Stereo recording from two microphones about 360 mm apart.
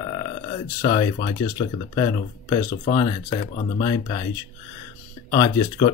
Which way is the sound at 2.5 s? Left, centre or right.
Left.